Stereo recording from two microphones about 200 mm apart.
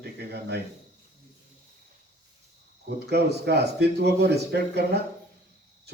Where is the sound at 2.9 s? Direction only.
55° right (ahead or behind).